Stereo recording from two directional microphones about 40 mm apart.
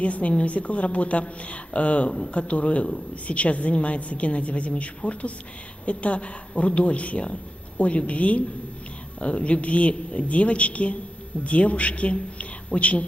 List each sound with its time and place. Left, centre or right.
0.0 s a woman's voice: left